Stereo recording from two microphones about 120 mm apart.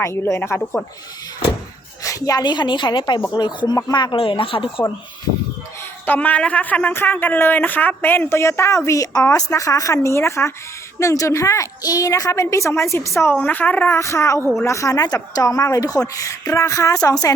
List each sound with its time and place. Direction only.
0.0 s speech: 20° left (ahead or behind)
2.0 s a woman's voice: 30° left (ahead or behind); by 4.7 s 45° left (ahead or behind)
6.1 s speech: 15° left (ahead or behind)
13.4 s speech: 15° left (ahead or behind); by 17.3 s 30° left (ahead or behind)